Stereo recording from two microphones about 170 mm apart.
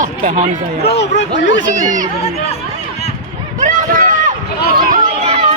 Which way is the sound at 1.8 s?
50° right (ahead or behind).